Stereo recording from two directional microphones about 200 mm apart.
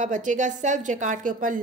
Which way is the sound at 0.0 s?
40° right (ahead or behind).